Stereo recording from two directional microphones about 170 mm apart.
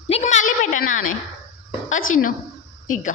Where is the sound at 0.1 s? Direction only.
45° left (ahead or behind).